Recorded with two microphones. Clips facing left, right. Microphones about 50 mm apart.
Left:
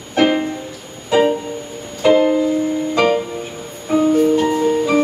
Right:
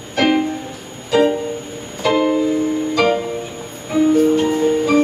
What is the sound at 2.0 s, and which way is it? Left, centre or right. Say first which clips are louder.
Music: left 3 dB; centre.